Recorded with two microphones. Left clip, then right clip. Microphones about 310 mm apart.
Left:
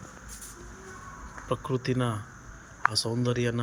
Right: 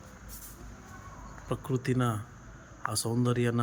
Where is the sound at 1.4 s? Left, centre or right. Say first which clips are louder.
Left 3 dB; centre.